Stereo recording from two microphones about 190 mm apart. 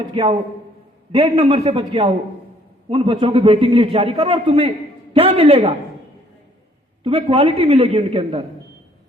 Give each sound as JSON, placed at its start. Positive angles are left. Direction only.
{"t": 0.1, "sound": "a man's voice", "side_deg": -30}
{"t": 7.0, "sound": "a woman's voice", "side_deg": -30}